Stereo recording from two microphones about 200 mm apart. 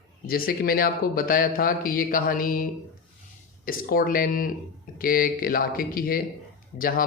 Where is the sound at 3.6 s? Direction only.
45° left (ahead or behind).